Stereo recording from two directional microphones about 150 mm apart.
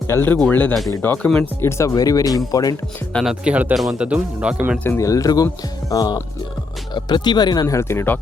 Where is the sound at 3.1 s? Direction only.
5° left (ahead or behind).